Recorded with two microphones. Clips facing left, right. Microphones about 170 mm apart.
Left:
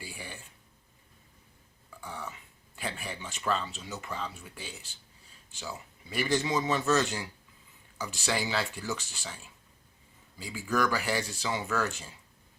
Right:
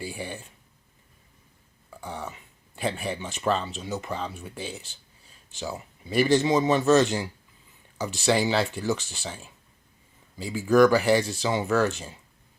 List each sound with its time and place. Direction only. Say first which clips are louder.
0.0 s a sound: right 9 dB; 25° right (ahead or behind)
2.0 s burping: right 5 dB; 25° right (ahead or behind)
2.7 s speech: right 9 dB; 25° right (ahead or behind)
6.1 s speech: right 8 dB; 25° right (ahead or behind)